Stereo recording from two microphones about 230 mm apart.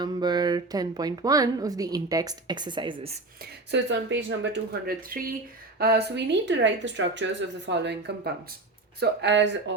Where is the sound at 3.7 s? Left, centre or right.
Right.